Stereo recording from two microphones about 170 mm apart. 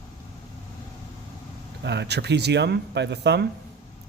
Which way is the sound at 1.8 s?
80° right.